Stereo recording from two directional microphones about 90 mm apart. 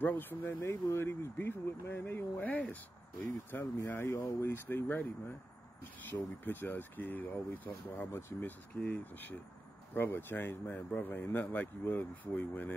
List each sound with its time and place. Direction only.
0.0 s speech: 20° left (ahead or behind)
6.0 s speech: 20° left (ahead or behind)